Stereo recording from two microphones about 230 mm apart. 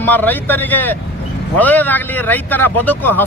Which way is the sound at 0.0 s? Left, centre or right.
Centre.